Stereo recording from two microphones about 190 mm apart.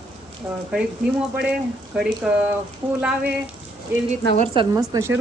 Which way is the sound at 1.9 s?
5° right (ahead or behind).